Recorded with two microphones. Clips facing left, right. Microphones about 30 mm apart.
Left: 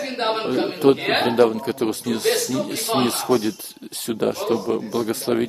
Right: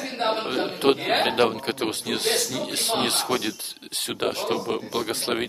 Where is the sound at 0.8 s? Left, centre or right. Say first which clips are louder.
Left 4 dB; right.